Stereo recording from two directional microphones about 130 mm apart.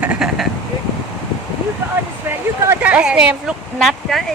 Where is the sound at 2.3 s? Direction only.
20° right (ahead or behind).